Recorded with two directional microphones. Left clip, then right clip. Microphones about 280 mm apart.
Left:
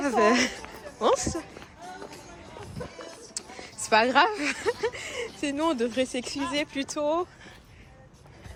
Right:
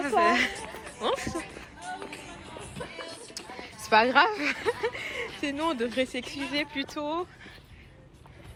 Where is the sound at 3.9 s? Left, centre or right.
Centre.